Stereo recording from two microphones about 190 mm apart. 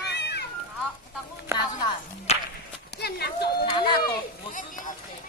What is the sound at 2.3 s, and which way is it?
Whip, 35° left (ahead or behind).